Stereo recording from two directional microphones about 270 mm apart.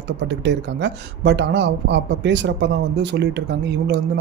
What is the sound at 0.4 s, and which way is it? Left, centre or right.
Speech, right.